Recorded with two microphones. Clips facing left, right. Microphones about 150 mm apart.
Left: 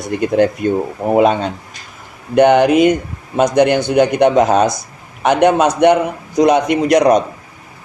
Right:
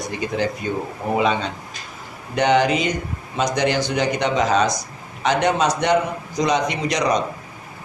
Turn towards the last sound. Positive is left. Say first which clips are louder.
# left 10 dB
turn(degrees=55)  # may be behind; listen again after turning